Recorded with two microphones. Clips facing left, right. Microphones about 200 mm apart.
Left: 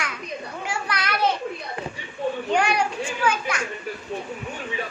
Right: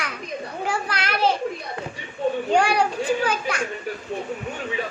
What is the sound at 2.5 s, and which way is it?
Speech, 30° right (ahead or behind).